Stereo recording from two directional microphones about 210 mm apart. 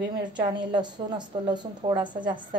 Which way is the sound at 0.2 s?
20° right (ahead or behind).